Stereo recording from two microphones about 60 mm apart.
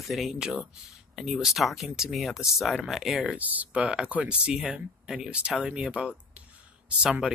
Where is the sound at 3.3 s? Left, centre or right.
Right.